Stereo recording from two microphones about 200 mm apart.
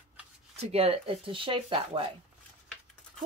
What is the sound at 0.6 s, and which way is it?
Speech, 30° right (ahead or behind).